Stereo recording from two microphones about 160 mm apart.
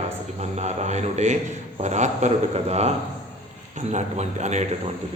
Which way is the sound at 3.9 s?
45° right (ahead or behind).